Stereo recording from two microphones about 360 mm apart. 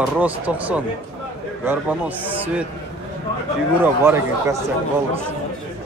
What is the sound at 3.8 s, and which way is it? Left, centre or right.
Speech, centre.